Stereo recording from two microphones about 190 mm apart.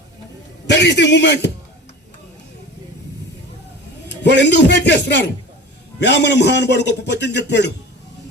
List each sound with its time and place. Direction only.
0.7 s speech: 65° left (ahead or behind)
4.2 s speech: 65° left (ahead or behind)